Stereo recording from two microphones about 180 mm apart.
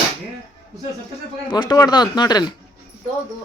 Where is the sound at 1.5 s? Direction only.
25° left (ahead or behind).